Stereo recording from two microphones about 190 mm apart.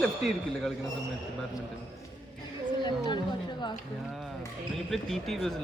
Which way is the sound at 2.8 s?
25° left (ahead or behind).